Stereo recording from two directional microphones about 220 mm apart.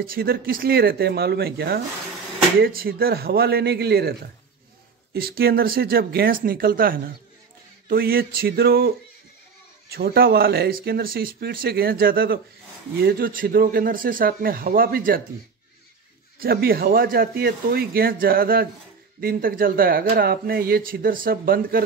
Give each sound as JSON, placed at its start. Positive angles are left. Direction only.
{"t": 0.0, "sound": "speech", "side_deg": -40}
{"t": 5.1, "sound": "speech", "side_deg": -45}
{"t": 16.3, "sound": "speech", "side_deg": -45}